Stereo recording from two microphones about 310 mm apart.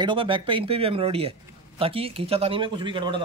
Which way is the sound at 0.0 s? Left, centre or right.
Centre.